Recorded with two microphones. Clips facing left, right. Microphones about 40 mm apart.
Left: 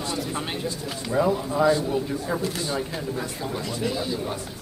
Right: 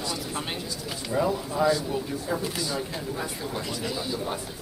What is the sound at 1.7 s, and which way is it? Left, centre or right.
Speech, left.